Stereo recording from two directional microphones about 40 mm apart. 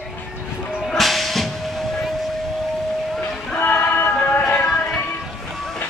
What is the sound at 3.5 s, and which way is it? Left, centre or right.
Music, left.